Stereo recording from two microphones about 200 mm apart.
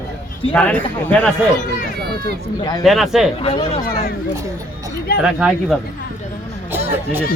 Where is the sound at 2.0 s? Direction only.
55° right (ahead or behind).